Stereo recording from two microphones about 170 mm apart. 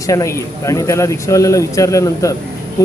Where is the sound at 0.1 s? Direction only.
20° left (ahead or behind).